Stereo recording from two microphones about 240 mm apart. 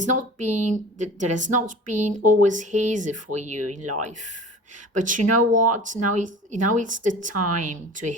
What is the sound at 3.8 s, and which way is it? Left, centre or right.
Speech, right.